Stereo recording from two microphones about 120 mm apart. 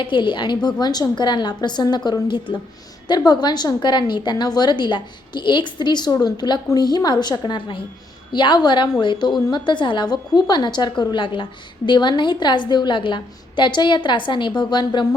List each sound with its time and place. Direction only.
0.0 s a woman's voice: 40° left (ahead or behind)